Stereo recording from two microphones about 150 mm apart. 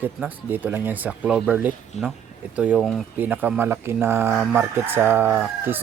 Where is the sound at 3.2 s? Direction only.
10° right (ahead or behind).